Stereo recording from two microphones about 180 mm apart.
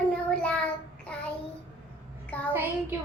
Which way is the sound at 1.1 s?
5° left (ahead or behind).